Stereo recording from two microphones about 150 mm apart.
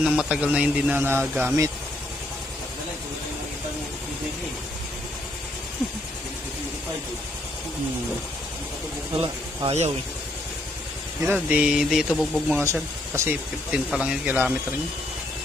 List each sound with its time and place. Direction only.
0.0 s speech: 5° right (ahead or behind)
9.6 s speech: 45° right (ahead or behind)
11.3 s speech: 10° right (ahead or behind)
12.6 s speech: 15° right (ahead or behind)